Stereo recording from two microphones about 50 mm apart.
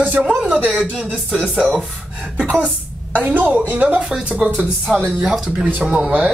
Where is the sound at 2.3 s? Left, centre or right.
Right.